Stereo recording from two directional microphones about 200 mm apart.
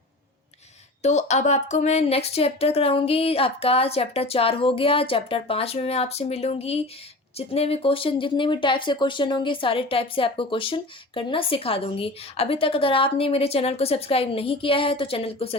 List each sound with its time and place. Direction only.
1.0 s speech: 35° left (ahead or behind)